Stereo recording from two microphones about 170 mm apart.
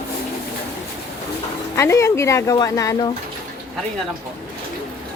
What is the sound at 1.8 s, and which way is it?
A woman's voice, 15° left (ahead or behind).